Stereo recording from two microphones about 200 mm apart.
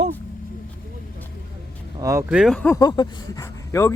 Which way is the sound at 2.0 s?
15° right (ahead or behind).